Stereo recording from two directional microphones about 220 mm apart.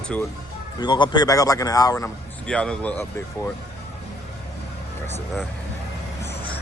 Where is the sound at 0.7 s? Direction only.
20° left (ahead or behind).